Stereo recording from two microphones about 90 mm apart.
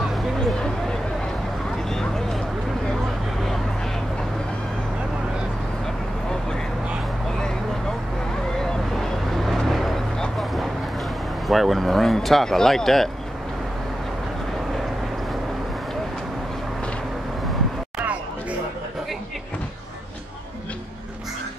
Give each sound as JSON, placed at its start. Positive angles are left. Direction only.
{"t": 0.1, "sound": "a sound", "side_deg": 5}
{"t": 8.5, "sound": "vehicle", "side_deg": 5}
{"t": 11.4, "sound": "speech", "side_deg": 0}